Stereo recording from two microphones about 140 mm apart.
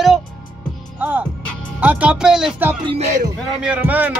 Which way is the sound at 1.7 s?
10° right (ahead or behind).